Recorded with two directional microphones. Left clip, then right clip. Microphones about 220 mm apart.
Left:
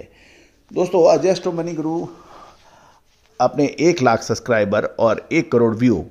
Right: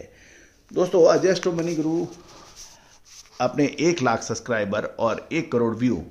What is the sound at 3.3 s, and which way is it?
Speech, 10° left (ahead or behind).